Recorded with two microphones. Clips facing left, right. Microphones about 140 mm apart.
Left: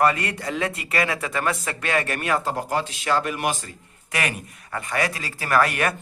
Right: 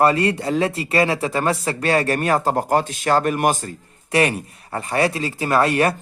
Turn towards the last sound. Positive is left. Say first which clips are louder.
# right 4 dB
turn(degrees=-30)  # may be behind; listen again after turning